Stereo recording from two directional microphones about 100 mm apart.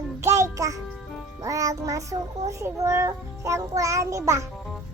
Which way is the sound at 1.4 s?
35° right (ahead or behind).